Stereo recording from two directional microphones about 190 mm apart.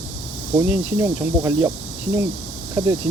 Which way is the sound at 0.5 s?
10° right (ahead or behind).